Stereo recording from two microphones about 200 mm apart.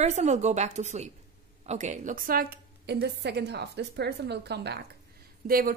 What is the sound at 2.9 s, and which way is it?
A woman's voice, 55° right (ahead or behind).